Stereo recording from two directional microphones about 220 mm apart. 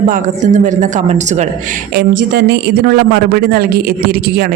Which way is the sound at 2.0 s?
50° right (ahead or behind).